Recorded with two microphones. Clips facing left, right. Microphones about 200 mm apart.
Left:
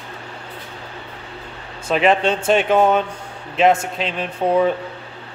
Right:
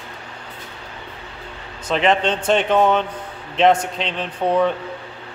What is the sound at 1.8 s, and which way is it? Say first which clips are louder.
Speech: left 2 dB; 10° left (ahead or behind).